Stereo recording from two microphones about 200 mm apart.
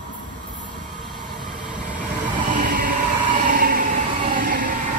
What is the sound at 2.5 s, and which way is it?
Train, 40° right (ahead or behind).